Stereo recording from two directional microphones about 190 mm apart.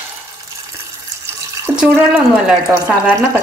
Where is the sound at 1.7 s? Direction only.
5° right (ahead or behind).